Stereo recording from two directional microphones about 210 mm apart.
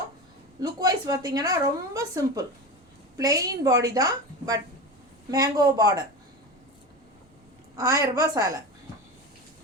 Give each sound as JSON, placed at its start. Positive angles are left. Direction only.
{"t": 0.6, "sound": "a woman's voice", "side_deg": -20}
{"t": 7.8, "sound": "a woman's voice", "side_deg": -15}